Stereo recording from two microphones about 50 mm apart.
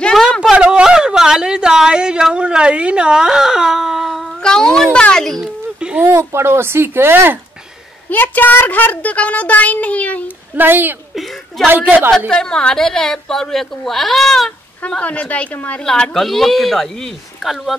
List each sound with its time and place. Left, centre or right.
0.4 s a sound: centre
4.4 s a woman's voice: centre
6.0 s speech: right
8.1 s a child's voice: left
10.5 s a woman's voice: right
11.1 s chuckle: centre
12.3 s a woman's voice: centre
14.9 s a woman's voice: left
15.8 s speech: centre
17.4 s speech: centre